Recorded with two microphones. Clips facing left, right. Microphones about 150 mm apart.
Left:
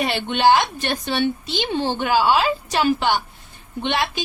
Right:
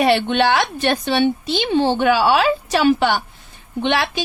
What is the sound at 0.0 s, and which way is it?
Speech, 70° right (ahead or behind).